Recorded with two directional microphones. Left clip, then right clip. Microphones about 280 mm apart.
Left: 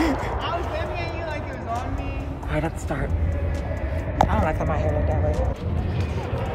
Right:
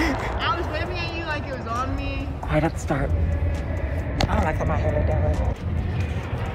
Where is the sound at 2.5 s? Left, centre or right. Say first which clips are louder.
Right 4 dB; right.